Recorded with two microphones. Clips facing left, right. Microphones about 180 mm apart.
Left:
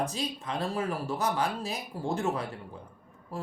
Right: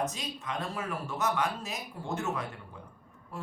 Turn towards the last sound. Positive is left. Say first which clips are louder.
# left 4 dB
turn(degrees=30)  # may be behind; listen again after turning